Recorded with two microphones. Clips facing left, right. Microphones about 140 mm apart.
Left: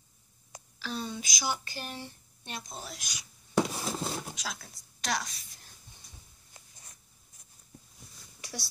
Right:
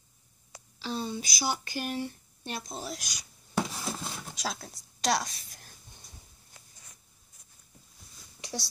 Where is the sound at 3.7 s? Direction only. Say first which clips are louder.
Left 1 dB; 20° left (ahead or behind).